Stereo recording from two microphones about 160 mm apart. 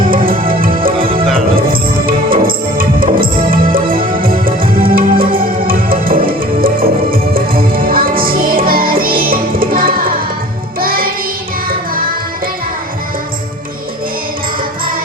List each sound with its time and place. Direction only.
0.3 s music: 60° right (ahead or behind)
0.9 s music: 35° right (ahead or behind)
1.5 s music: 65° right (ahead or behind)